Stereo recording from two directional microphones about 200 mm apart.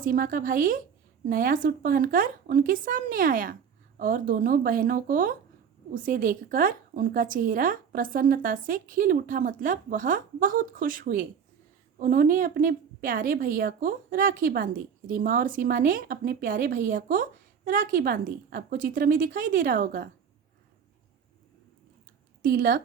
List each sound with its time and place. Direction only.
0.0 s a woman's voice: 45° right (ahead or behind)
22.4 s speech: 50° right (ahead or behind)